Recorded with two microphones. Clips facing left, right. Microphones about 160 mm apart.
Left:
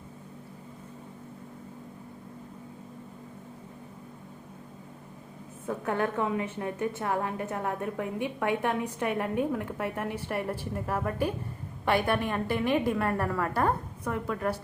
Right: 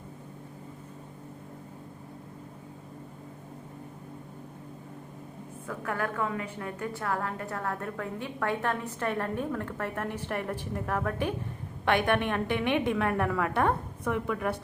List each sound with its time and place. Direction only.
5.6 s a woman's voice: 25° left (ahead or behind); by 14.5 s 5° right (ahead or behind)